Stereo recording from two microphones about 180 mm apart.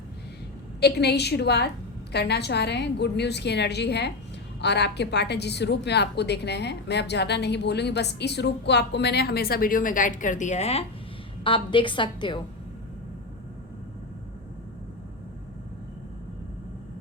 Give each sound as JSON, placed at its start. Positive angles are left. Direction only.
{"t": 0.8, "sound": "a woman's voice", "side_deg": 65}